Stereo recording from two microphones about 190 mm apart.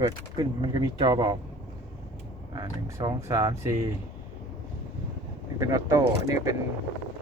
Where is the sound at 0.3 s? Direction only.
20° right (ahead or behind).